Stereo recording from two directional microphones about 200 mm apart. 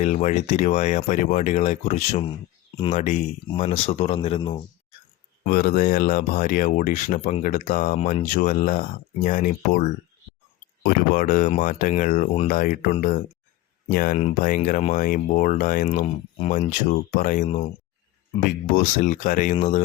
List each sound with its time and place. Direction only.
0.0 s speech: 40° left (ahead or behind)
5.5 s speech: 45° left (ahead or behind)